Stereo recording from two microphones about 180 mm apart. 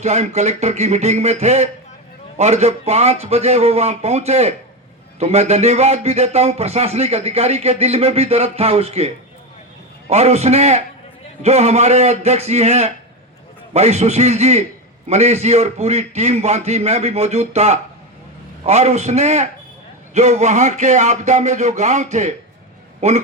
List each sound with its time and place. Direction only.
0.0 s speech: 40° right (ahead or behind)